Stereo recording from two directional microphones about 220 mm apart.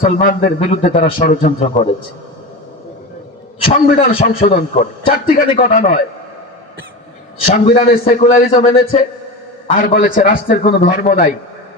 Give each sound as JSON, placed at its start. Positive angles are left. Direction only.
{"t": 0.0, "sound": "a man's voice", "side_deg": 40}
{"t": 3.8, "sound": "a man's voice", "side_deg": 40}
{"t": 7.4, "sound": "a man's voice", "side_deg": 30}